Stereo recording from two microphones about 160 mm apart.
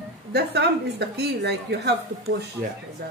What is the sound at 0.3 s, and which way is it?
A woman's voice, 90° right.